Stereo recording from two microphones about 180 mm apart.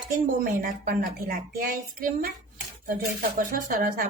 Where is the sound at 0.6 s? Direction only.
55° right (ahead or behind).